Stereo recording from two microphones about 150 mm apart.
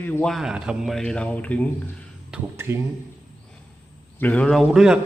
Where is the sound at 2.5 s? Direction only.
15° right (ahead or behind).